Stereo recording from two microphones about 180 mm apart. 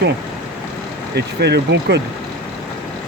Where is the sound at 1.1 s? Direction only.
70° right (ahead or behind).